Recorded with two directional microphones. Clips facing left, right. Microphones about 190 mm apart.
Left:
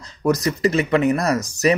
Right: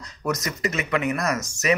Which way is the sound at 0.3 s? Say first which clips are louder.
Left 8 dB; 35° left (ahead or behind).